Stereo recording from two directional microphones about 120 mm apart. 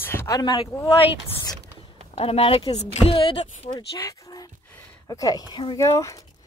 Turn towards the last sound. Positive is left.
turn(degrees=25)  # may be behind; listen again after turning